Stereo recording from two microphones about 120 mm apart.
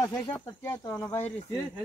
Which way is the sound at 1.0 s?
20° left (ahead or behind).